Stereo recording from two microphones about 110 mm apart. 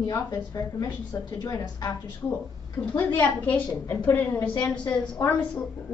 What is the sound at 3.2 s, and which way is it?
A woman's voice, 15° left (ahead or behind).